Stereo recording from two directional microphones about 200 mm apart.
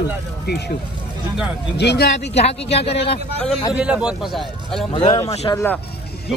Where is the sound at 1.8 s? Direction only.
55° left (ahead or behind).